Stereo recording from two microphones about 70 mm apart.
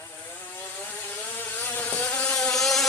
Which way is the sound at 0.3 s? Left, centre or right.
Left.